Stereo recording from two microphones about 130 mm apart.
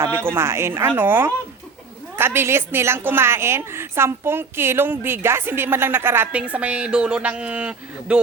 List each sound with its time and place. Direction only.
0.0 s a woman's voice: 20° right (ahead or behind)